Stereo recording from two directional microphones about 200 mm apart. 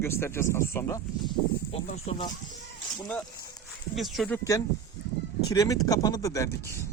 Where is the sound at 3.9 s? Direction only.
Centre (ahead or behind).